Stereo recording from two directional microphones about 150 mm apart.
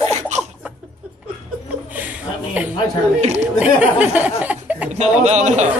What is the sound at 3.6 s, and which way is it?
Speech, 10° right (ahead or behind).